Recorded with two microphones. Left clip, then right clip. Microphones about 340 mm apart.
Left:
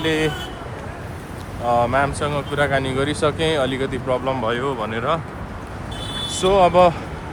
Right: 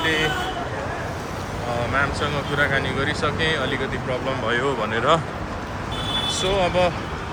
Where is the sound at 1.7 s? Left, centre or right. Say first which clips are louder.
Left 5 dB; centre.